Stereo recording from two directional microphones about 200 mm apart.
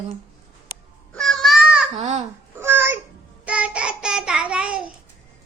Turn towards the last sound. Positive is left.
turn(degrees=-5)  # may be behind; listen again after turning